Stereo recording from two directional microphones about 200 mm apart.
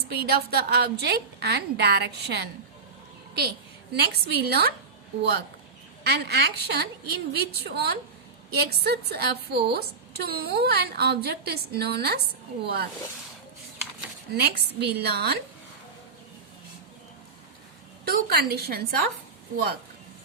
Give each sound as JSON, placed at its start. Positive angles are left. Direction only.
{"t": 0.1, "sound": "a woman's voice", "side_deg": -50}
{"t": 3.9, "sound": "a woman's voice", "side_deg": -55}
{"t": 6.0, "sound": "a woman's voice", "side_deg": -55}
{"t": 14.3, "sound": "a woman's voice", "side_deg": -55}
{"t": 18.0, "sound": "a woman's voice", "side_deg": -50}